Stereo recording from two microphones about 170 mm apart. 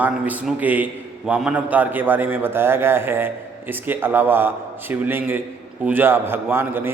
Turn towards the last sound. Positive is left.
turn(degrees=-15)  # may be behind; listen again after turning